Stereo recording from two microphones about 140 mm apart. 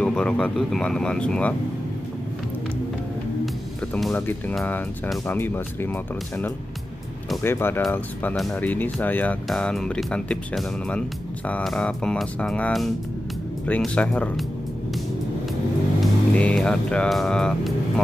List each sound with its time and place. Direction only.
0.0 s speech: 5° left (ahead or behind)
4.1 s speech: 10° left (ahead or behind)
7.4 s speech: 15° left (ahead or behind)
16.0 s speech: 5° left (ahead or behind)